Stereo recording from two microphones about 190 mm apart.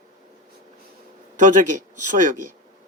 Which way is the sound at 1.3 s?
40° right (ahead or behind).